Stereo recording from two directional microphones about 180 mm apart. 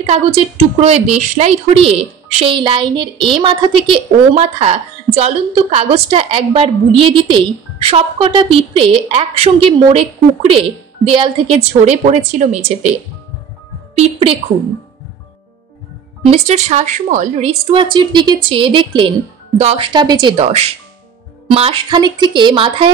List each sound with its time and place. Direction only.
0.0 s a woman's voice: 35° right (ahead or behind)
16.3 s a woman's voice: 40° right (ahead or behind)